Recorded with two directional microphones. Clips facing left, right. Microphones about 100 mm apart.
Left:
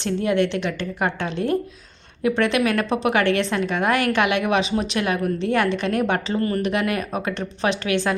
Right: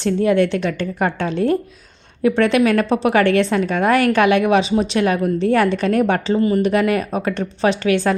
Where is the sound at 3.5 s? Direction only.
35° right (ahead or behind).